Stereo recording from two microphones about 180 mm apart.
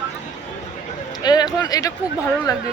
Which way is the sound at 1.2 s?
20° left (ahead or behind).